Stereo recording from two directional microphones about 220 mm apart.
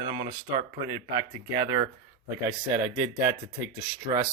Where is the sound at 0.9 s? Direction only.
15° right (ahead or behind).